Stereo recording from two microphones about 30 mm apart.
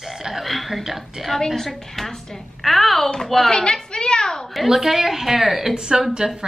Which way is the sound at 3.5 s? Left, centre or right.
Left.